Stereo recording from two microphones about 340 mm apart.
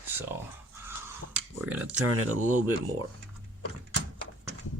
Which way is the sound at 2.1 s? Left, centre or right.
Right.